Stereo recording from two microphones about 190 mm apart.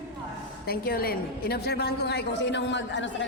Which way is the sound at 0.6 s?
55° left (ahead or behind).